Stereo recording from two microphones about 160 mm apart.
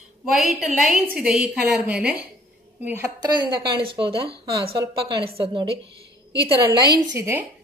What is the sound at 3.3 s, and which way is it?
A woman's voice, 30° right (ahead or behind).